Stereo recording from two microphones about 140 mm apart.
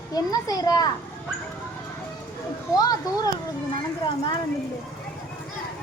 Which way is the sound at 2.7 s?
25° left (ahead or behind).